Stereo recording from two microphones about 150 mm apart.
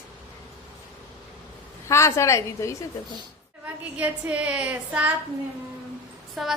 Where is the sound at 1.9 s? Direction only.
20° left (ahead or behind).